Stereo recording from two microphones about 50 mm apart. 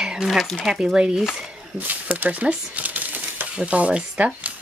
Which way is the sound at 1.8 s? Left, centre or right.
Right.